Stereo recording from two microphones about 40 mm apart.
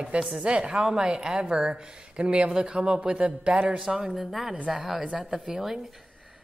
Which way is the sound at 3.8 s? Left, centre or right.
Centre.